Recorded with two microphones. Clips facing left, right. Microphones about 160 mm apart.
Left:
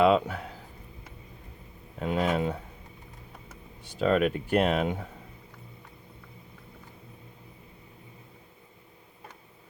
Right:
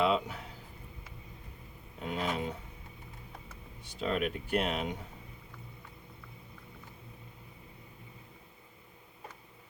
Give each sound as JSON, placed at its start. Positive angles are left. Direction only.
{"t": 0.0, "sound": "a sound", "side_deg": 60}
{"t": 2.0, "sound": "speech", "side_deg": 60}
{"t": 4.0, "sound": "speech", "side_deg": 60}